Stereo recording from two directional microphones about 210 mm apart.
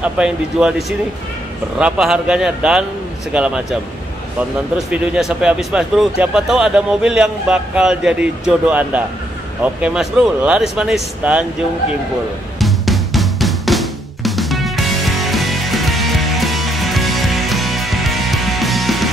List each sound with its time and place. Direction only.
0.0 s speech: 5° right (ahead or behind)
4.9 s speech: 5° right (ahead or behind)
12.5 s drum: centre (ahead or behind)